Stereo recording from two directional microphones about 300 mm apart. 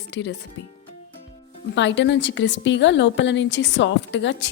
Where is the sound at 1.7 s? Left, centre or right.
Left.